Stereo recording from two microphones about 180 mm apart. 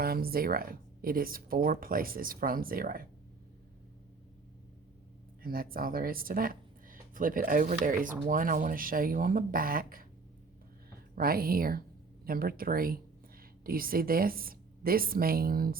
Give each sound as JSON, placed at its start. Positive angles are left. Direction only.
{"t": 0.0, "sound": "speech", "side_deg": -55}
{"t": 5.4, "sound": "speech", "side_deg": -55}
{"t": 11.1, "sound": "speech", "side_deg": -55}